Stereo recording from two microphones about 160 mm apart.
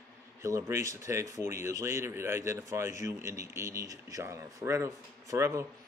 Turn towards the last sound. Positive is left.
turn(degrees=-15)  # may be behind; listen again after turning